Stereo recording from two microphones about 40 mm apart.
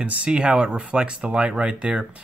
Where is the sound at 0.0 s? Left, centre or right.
Right.